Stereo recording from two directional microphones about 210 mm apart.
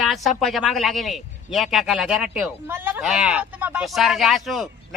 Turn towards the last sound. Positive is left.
turn(degrees=0)  # may be behind; listen again after turning